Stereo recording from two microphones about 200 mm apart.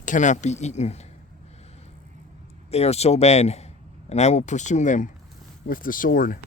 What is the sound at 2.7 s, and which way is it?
Speech, 30° left (ahead or behind).